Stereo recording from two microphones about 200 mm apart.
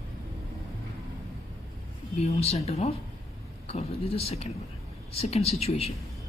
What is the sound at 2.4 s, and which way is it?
Speech, 30° left (ahead or behind).